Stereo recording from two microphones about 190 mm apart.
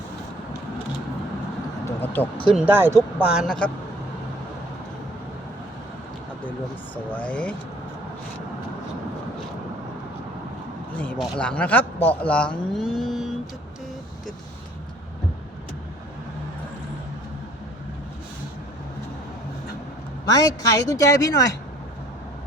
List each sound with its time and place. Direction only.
1.8 s a sound: 10° left (ahead or behind)
2.5 s speech: 5° right (ahead or behind)
3.2 s speech: centre (ahead or behind)
6.9 s speech: 10° left (ahead or behind)
10.9 s speech: 5° left (ahead or behind)
20.3 s speech: 20° left (ahead or behind)